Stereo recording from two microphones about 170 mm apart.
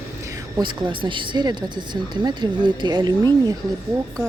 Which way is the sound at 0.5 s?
30° right (ahead or behind).